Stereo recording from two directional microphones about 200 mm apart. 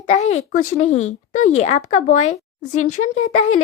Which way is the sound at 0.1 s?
35° left (ahead or behind).